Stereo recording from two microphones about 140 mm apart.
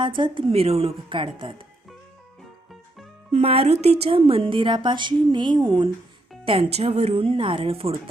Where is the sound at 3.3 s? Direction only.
45° right (ahead or behind).